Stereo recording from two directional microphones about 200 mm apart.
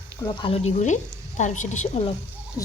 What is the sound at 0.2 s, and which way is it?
Speech, 25° left (ahead or behind).